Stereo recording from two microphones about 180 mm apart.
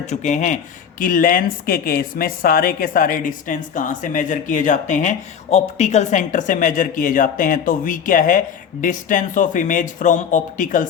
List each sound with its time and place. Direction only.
0.0 s speech: 40° left (ahead or behind)